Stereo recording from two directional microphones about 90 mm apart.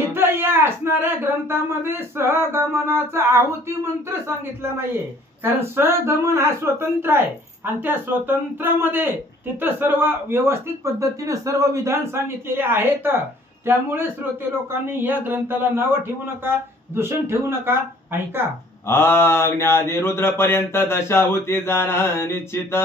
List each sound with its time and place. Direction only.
0.0 s speech: 25° right (ahead or behind)
18.9 s mantra: 25° left (ahead or behind)